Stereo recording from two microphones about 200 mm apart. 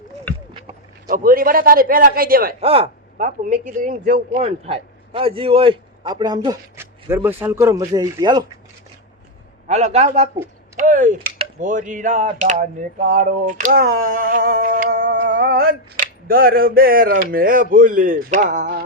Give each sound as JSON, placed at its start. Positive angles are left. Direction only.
{"t": 1.0, "sound": "a man's voice", "side_deg": -45}
{"t": 2.6, "sound": "speech", "side_deg": -30}
{"t": 3.2, "sound": "speech", "side_deg": -40}
{"t": 9.6, "sound": "a sound", "side_deg": -35}
{"t": 10.8, "sound": "speech", "side_deg": -40}
{"t": 11.6, "sound": "a sound", "side_deg": -40}
{"t": 14.0, "sound": "a man's voice", "side_deg": -45}
{"t": 15.2, "sound": "a sound", "side_deg": -45}
{"t": 16.2, "sound": "a man's voice", "side_deg": -45}